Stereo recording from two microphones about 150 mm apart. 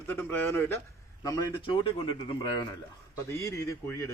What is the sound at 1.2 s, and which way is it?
Speech, 35° left (ahead or behind).